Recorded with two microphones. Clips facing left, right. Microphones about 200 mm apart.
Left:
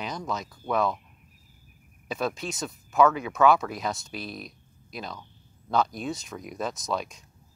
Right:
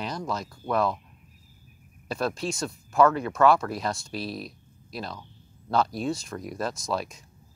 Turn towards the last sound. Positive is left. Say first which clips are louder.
# right 1 dB
turn(degrees=0)  # may be behind; listen again after turning